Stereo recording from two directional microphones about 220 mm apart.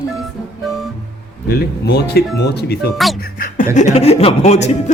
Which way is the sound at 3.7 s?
30° left (ahead or behind).